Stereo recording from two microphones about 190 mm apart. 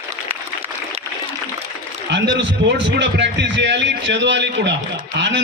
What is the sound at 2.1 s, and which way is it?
A man's voice, 65° right (ahead or behind).